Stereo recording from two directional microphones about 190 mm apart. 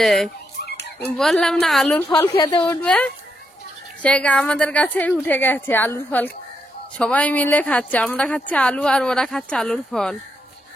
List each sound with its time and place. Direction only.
0.0 s a woman's voice: centre (ahead or behind)
0.7 s music: 60° left (ahead or behind)
1.0 s a woman's voice: 5° left (ahead or behind)